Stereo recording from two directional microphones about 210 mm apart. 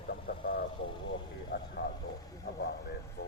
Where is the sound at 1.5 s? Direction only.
45° left (ahead or behind).